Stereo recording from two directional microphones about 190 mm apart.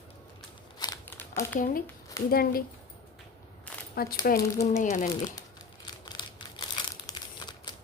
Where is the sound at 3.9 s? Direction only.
55° left (ahead or behind).